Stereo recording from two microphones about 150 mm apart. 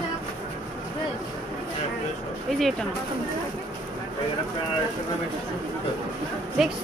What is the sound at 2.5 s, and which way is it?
Speech, centre (ahead or behind).